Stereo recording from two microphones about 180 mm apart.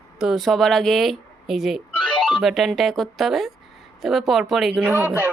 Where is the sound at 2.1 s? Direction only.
25° left (ahead or behind).